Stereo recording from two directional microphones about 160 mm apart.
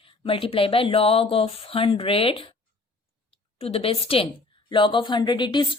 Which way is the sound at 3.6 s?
35° left (ahead or behind).